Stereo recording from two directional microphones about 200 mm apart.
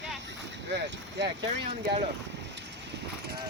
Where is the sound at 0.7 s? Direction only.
60° right (ahead or behind).